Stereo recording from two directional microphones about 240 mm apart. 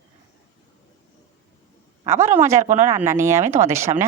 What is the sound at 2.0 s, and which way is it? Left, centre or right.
Speech, centre.